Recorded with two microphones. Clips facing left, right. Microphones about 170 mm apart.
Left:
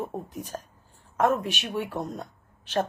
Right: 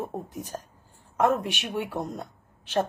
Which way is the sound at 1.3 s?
60° right (ahead or behind).